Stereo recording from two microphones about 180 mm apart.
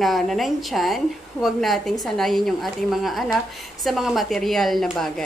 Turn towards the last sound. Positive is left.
turn(degrees=0)  # may be behind; listen again after turning